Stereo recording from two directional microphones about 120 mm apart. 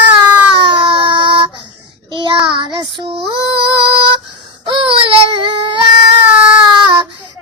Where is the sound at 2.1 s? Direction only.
40° right (ahead or behind).